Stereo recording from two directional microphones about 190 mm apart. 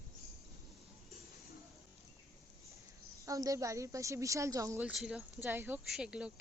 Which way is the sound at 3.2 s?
20° right (ahead or behind).